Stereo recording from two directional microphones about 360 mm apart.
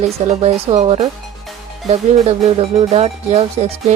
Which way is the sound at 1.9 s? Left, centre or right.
Centre.